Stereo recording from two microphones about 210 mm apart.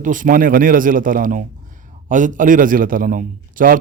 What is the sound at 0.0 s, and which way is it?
A man's voice, 40° right (ahead or behind).